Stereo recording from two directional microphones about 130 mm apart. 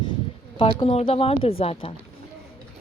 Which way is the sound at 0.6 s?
45° left (ahead or behind).